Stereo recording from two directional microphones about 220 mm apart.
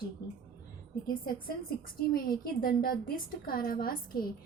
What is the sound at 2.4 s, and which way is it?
A woman's voice, 40° left (ahead or behind).